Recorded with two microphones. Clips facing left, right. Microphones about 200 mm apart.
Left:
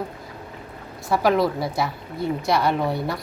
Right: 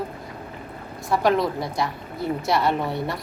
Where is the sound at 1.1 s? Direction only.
5° left (ahead or behind).